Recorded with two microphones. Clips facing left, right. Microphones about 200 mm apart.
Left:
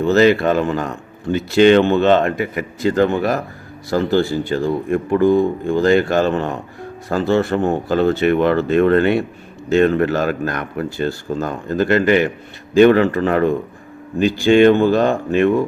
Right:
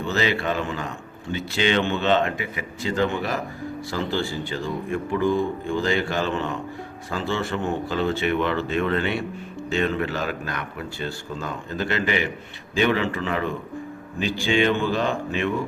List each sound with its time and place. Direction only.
0.1 s speech: 45° left (ahead or behind)